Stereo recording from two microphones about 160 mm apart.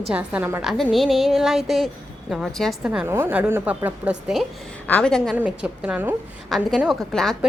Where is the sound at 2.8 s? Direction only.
10° right (ahead or behind).